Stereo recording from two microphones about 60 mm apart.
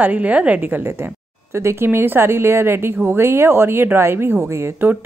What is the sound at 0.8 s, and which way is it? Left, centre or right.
A woman's voice, right.